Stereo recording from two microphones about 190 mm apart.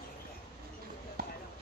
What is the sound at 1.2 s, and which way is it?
Basketball bounce, 50° right (ahead or behind).